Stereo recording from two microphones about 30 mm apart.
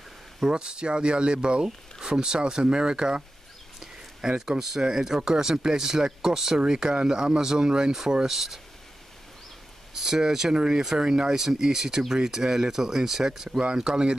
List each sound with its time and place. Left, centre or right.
0.5 s speech: right
4.4 s speech: centre
8.3 s speech: centre
9.9 s speech: centre
13.5 s speech: right